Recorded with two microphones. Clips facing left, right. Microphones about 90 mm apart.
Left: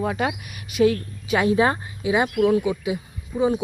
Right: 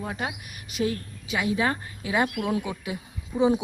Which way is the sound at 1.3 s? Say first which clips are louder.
Left 7 dB; 45° left (ahead or behind).